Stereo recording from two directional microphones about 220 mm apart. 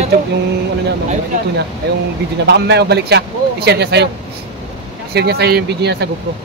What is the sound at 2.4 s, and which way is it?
Speech, 50° right (ahead or behind).